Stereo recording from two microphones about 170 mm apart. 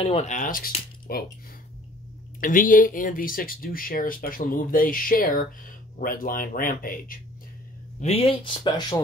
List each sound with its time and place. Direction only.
0.0 s speech: 40° left (ahead or behind); by 1.2 s 60° left (ahead or behind)
2.4 s speech: 50° left (ahead or behind)
8.0 s speech: 35° left (ahead or behind)